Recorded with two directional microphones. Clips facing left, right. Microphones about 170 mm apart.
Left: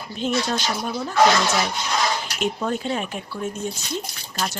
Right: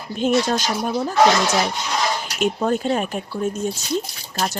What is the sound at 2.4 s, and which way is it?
Speech, 45° right (ahead or behind).